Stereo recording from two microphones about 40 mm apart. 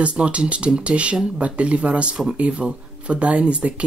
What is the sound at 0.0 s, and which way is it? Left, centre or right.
Speech, right.